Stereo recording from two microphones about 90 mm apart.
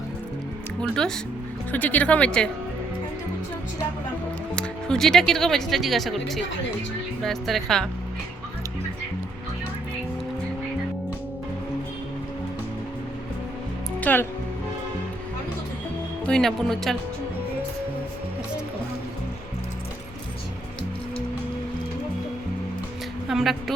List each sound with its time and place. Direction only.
0.8 s speech: 5° left (ahead or behind)
1.7 s speech: 15° left (ahead or behind)
4.5 s speech: 5° left (ahead or behind)
14.0 s speech: 20° left (ahead or behind)
16.2 s speech: 5° left (ahead or behind)
23.3 s a woman's voice: centre (ahead or behind)